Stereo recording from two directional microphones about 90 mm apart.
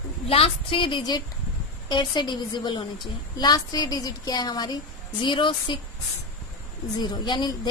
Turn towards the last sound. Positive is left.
turn(degrees=55)  # may be behind; listen again after turning